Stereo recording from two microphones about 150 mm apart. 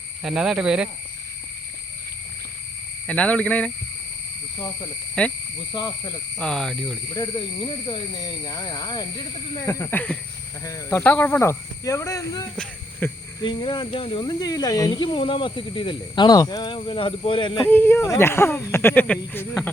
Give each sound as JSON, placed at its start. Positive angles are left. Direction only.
{"t": 0.2, "sound": "speech", "side_deg": -5}
{"t": 3.1, "sound": "speech", "side_deg": 10}
{"t": 5.2, "sound": "speech", "side_deg": 5}
{"t": 5.7, "sound": "speech", "side_deg": 30}
{"t": 6.4, "sound": "speech", "side_deg": 5}
{"t": 7.1, "sound": "speech", "side_deg": 35}
{"t": 13.4, "sound": "speech", "side_deg": 30}
{"t": 17.7, "sound": "speech", "side_deg": 15}